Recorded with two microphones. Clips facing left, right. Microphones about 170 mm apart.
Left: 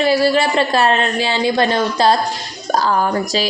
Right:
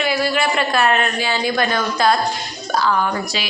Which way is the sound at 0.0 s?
35° left (ahead or behind).